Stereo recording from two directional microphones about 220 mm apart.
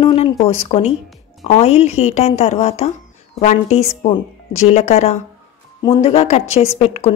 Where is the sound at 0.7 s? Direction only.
25° left (ahead or behind).